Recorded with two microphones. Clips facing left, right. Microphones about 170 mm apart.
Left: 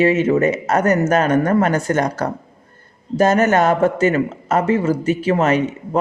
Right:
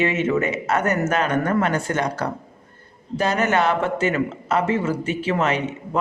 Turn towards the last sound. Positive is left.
turn(degrees=40)  # may be behind; listen again after turning